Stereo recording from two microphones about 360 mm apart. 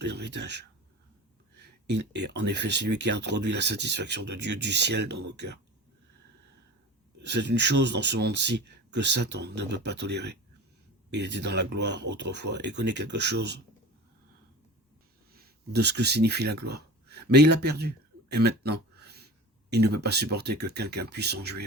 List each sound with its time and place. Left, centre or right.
0.0 s speech: right
2.0 s speech: right
7.2 s speech: right
15.4 s speech: right